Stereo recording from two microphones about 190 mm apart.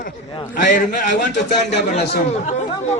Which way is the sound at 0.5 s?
45° left (ahead or behind).